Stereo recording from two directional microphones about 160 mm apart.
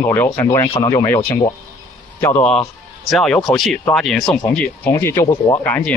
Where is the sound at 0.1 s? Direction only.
15° left (ahead or behind).